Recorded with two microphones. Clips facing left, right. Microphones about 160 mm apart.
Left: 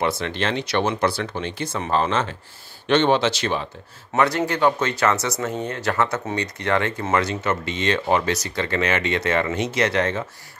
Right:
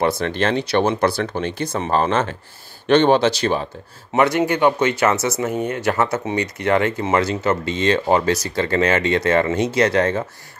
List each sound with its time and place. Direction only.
0.0 s speech: 45° right (ahead or behind)
4.1 s speech: 20° right (ahead or behind); by 10.2 s 35° right (ahead or behind)